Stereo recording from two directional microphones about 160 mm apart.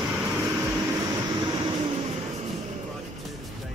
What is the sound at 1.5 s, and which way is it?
Vehicle, 35° right (ahead or behind).